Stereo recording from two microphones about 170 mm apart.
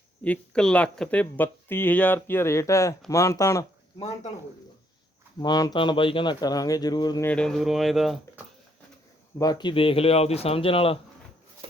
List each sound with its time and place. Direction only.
0.3 s speech: 5° left (ahead or behind)
5.4 s speech: 20° left (ahead or behind)
7.3 s speech: 5° left (ahead or behind)
9.4 s speech: 25° left (ahead or behind)
11.6 s rub: 35° right (ahead or behind)